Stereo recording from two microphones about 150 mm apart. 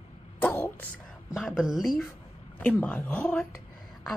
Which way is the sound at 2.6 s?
10° left (ahead or behind).